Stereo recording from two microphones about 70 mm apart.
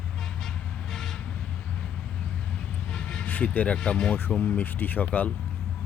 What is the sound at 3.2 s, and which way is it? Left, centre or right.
Speech, left.